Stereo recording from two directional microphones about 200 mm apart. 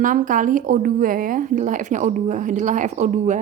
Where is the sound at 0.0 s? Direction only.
40° right (ahead or behind).